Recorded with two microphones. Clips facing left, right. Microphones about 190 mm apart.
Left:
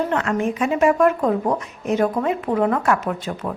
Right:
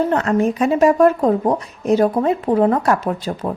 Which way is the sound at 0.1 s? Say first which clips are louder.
Right 4 dB; 35° right (ahead or behind).